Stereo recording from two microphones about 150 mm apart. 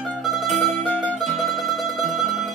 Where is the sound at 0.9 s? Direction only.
10° left (ahead or behind).